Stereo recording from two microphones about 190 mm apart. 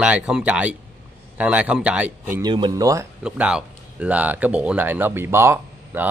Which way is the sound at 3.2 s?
5° right (ahead or behind).